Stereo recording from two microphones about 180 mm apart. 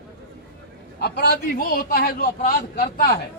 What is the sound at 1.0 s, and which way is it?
A man's voice, 65° left (ahead or behind).